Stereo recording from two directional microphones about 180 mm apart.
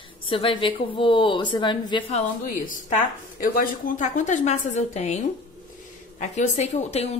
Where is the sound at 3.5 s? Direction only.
50° left (ahead or behind).